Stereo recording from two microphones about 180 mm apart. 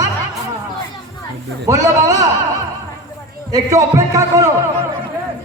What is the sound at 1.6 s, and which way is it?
Speech, 20° right (ahead or behind).